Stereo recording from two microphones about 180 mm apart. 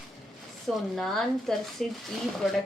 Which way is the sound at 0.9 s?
Centre (ahead or behind).